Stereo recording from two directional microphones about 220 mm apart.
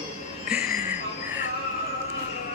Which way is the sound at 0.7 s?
40° left (ahead or behind).